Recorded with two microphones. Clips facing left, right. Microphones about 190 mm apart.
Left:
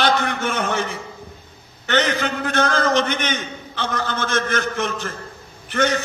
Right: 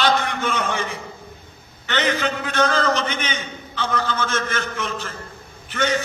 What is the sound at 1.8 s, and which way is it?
A man's voice, 50° left (ahead or behind).